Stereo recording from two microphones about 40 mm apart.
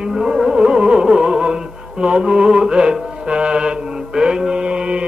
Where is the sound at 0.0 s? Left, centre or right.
Centre.